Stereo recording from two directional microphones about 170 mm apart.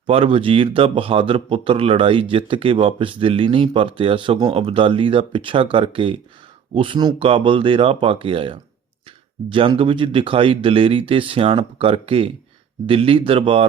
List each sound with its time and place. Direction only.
0.1 s speech: 35° right (ahead or behind)